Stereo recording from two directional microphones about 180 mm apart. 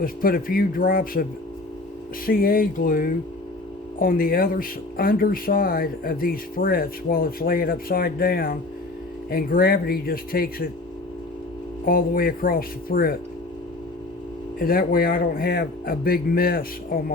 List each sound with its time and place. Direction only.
0.0 s speech: 55° left (ahead or behind)
2.2 s speech: 55° left (ahead or behind)
11.9 s speech: 55° left (ahead or behind)
14.6 s speech: 55° left (ahead or behind)